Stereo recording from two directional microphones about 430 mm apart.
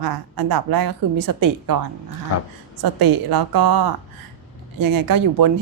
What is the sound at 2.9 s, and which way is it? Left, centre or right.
A woman's voice, right.